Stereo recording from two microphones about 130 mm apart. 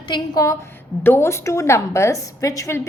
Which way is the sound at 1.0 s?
15° left (ahead or behind).